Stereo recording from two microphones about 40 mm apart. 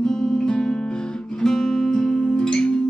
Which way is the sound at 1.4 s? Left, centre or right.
Centre.